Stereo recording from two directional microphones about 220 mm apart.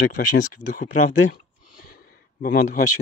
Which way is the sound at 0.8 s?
70° left (ahead or behind).